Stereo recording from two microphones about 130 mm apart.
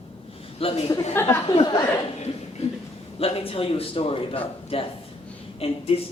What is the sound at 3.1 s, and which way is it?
A man's voice, 45° left (ahead or behind).